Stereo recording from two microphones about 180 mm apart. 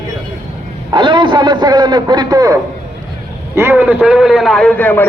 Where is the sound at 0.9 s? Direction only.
25° right (ahead or behind); by 5.0 s 10° left (ahead or behind).